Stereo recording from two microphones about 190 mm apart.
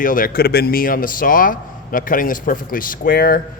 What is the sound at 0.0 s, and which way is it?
Speech, 45° left (ahead or behind).